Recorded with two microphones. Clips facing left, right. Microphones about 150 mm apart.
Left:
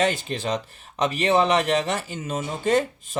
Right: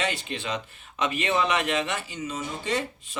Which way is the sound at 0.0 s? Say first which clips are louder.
Left 6 dB; 40° left (ahead or behind).